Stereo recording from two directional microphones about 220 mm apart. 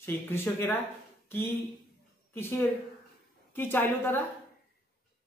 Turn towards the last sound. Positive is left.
turn(degrees=10)  # may be behind; listen again after turning